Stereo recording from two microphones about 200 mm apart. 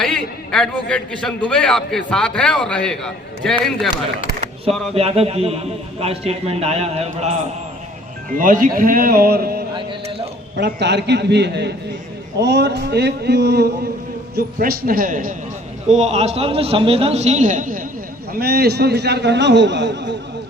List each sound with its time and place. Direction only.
0.0 s a man's voice: 5° left (ahead or behind)
4.9 s a man's voice: 30° right (ahead or behind)
8.4 s a man's voice: 40° right (ahead or behind)
18.3 s a man's voice: 50° right (ahead or behind)